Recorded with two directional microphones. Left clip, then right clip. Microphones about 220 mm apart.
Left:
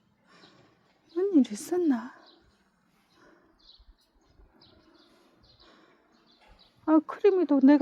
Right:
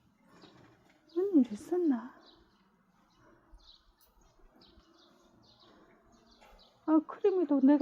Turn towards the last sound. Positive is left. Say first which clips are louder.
# left 6 dB
turn(degrees=20)  # may be behind; listen again after turning